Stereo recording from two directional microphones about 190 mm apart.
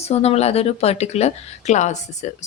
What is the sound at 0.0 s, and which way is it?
Speech, 35° left (ahead or behind).